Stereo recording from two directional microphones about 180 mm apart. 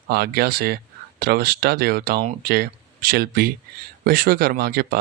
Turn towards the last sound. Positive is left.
turn(degrees=-55)  # may be behind; listen again after turning